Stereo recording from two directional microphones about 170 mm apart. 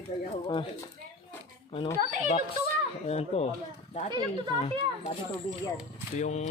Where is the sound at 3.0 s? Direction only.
40° left (ahead or behind).